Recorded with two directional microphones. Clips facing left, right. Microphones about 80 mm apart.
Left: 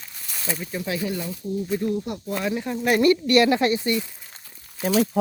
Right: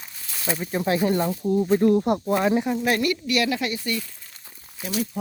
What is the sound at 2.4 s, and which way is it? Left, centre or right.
Speech, right.